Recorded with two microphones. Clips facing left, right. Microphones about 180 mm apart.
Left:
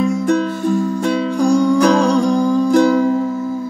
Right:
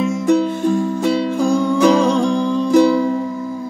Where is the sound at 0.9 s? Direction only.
20° right (ahead or behind).